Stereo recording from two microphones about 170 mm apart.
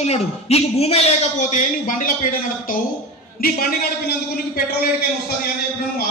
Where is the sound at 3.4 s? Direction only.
60° left (ahead or behind).